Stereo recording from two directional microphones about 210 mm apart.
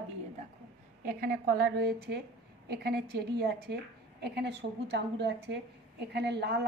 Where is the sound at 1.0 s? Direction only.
45° right (ahead or behind).